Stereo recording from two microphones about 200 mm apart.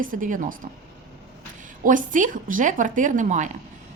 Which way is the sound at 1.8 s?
40° right (ahead or behind).